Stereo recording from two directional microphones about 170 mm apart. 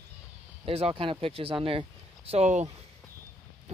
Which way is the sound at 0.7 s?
35° right (ahead or behind).